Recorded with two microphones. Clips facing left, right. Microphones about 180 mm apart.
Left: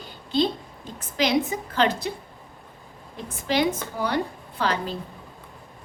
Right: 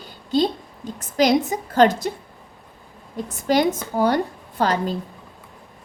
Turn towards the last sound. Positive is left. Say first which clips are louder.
# right 5 dB
turn(degrees=-40)  # may be behind; listen again after turning